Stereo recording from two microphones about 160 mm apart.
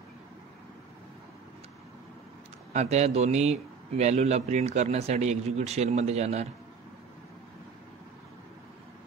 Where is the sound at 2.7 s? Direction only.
45° right (ahead or behind).